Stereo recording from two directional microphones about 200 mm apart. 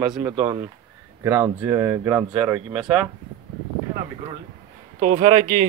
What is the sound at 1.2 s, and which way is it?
Speech, 10° right (ahead or behind).